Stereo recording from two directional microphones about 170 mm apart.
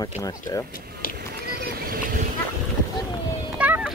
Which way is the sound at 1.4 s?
60° right (ahead or behind).